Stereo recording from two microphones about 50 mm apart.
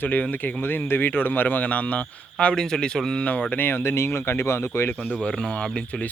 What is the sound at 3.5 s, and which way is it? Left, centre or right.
Speech, left.